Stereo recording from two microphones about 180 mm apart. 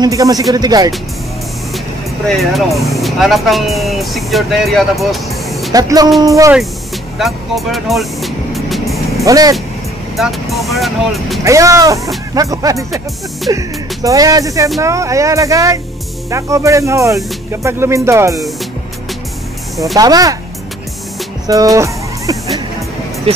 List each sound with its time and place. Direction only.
0.0 s speech: 20° right (ahead or behind)
2.2 s speech: centre (ahead or behind)
5.7 s speech: 20° right (ahead or behind)
7.2 s speech: centre (ahead or behind)
9.2 s speech: 20° right (ahead or behind)
10.1 s speech: centre (ahead or behind)
11.4 s speech: 15° right (ahead or behind)
20.0 s speech: 20° right (ahead or behind)
21.5 s music: 20° right (ahead or behind)